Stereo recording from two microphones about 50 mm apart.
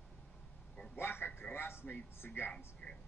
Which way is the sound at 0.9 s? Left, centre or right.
Left.